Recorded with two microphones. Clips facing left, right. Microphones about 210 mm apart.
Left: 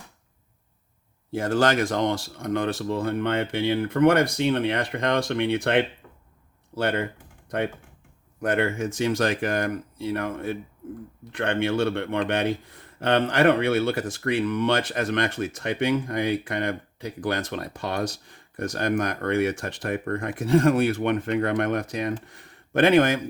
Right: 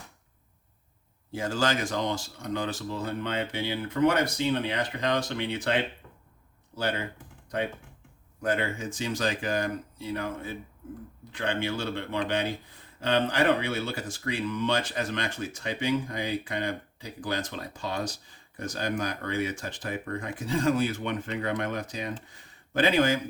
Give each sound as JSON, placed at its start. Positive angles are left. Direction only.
{"t": 1.3, "sound": "speech", "side_deg": 55}
{"t": 8.4, "sound": "speech", "side_deg": 55}